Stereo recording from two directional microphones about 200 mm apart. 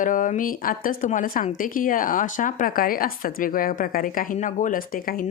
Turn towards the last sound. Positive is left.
turn(degrees=45)  # may be behind; listen again after turning